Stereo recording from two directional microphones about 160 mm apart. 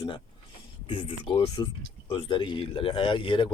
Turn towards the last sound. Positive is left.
turn(degrees=30)  # may be behind; listen again after turning